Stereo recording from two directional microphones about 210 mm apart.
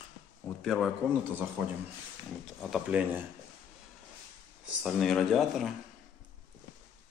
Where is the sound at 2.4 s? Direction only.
Centre (ahead or behind).